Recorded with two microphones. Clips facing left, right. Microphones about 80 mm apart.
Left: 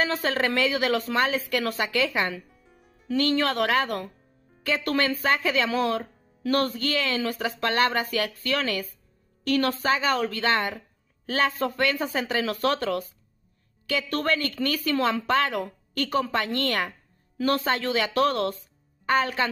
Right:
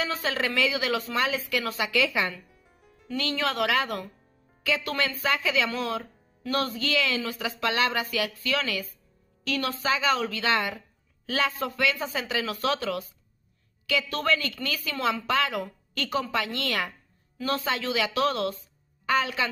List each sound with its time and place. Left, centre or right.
0.0 s speech: left